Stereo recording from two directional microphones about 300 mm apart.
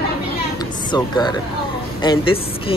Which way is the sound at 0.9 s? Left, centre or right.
Centre.